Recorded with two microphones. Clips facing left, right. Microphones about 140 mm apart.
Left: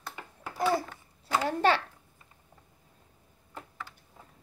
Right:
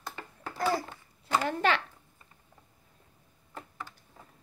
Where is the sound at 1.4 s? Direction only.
35° left (ahead or behind).